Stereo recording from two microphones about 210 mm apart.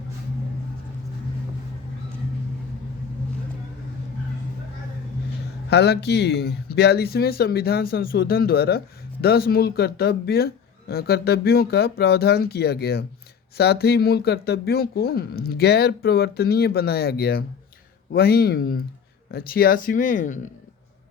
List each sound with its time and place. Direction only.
5.7 s speech: 50° left (ahead or behind)